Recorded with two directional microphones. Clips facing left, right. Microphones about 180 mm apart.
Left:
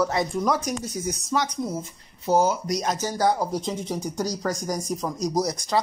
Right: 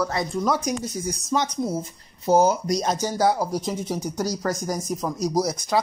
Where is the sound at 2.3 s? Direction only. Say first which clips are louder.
Right 3 dB; 40° right (ahead or behind).